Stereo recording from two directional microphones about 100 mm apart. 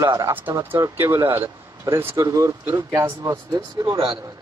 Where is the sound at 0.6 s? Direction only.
25° right (ahead or behind).